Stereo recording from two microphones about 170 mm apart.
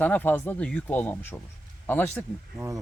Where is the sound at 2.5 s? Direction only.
20° right (ahead or behind).